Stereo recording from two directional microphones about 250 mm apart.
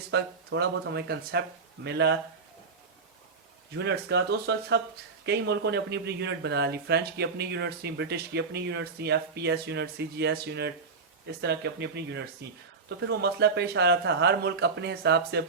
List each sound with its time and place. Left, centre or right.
0.1 s speech: right
3.8 s speech: right